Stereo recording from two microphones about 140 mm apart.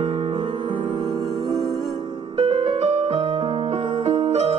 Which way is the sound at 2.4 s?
45° right (ahead or behind).